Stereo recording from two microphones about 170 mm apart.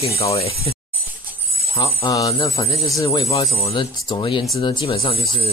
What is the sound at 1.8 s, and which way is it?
Speech, 25° left (ahead or behind).